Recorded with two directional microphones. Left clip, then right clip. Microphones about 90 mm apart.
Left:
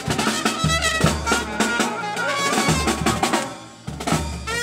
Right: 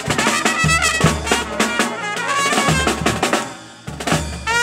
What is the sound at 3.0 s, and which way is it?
Drum, 30° right (ahead or behind).